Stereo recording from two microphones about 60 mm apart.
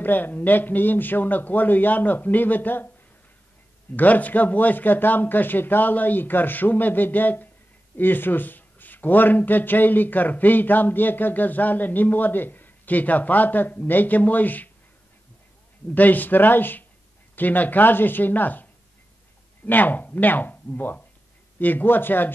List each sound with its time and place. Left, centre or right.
0.0 s speech: left
3.9 s speech: left
15.9 s speech: left